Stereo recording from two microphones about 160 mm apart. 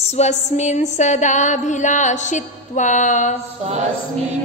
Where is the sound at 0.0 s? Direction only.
45° left (ahead or behind).